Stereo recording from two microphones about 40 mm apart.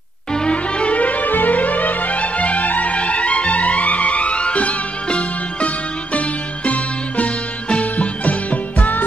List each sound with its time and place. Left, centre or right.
0.3 s music: left